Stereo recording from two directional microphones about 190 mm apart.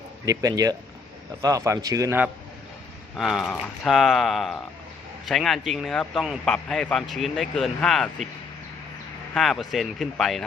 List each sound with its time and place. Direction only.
0.3 s a man's voice: 20° right (ahead or behind)
3.2 s a man's voice: centre (ahead or behind)
9.3 s a man's voice: centre (ahead or behind)